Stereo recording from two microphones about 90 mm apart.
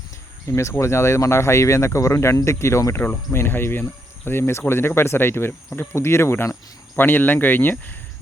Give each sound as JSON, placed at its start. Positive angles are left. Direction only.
{"t": 0.5, "sound": "speech", "side_deg": 30}